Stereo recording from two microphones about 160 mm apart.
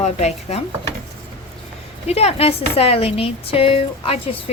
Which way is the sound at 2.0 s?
40° left (ahead or behind).